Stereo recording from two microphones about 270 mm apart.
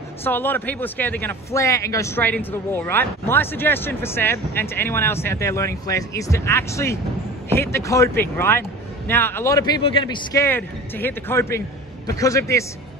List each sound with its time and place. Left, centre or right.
0.2 s speech: centre